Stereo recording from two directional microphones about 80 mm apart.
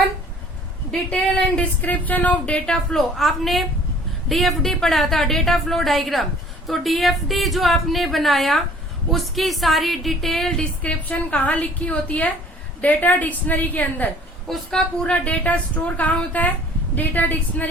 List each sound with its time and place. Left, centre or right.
0.9 s a woman's voice: centre
10.8 s a woman's voice: centre
14.4 s a woman's voice: centre; by 17.7 s left